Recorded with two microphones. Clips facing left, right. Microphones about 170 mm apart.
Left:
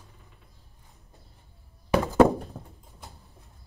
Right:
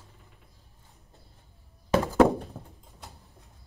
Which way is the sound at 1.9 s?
20° left (ahead or behind).